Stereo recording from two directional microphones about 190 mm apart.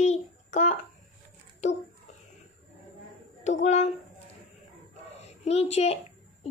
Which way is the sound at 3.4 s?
35° left (ahead or behind).